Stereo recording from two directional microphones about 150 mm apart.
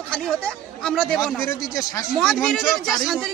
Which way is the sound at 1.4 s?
20° left (ahead or behind).